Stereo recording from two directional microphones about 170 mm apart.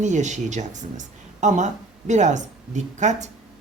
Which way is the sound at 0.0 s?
45° right (ahead or behind).